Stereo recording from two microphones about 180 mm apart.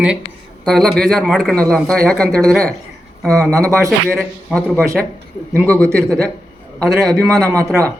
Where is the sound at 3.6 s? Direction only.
15° right (ahead or behind).